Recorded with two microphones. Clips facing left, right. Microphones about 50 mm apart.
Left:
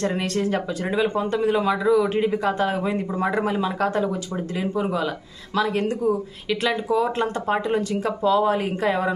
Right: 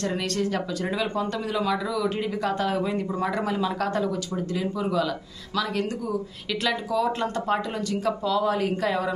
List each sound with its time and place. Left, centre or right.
0.0 s speech: left
4.6 s speech: left